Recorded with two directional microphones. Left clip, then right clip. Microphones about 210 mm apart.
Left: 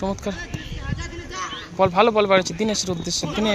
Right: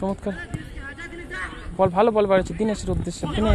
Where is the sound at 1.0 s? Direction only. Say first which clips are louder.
Left 1 dB; 55° right (ahead or behind).